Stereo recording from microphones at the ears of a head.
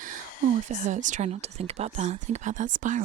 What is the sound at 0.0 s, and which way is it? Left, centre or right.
Speech, right.